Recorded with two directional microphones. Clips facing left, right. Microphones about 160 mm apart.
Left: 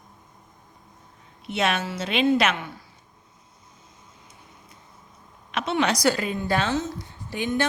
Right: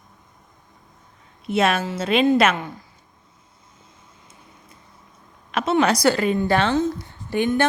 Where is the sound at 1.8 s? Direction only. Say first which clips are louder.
Right 5 dB; 40° right (ahead or behind).